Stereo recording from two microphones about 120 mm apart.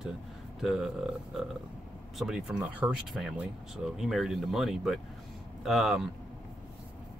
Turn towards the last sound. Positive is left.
turn(degrees=0)  # may be behind; listen again after turning